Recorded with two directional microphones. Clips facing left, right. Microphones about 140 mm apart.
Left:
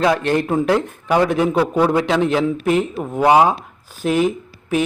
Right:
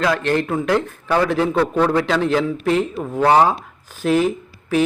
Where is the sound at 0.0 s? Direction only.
20° left (ahead or behind).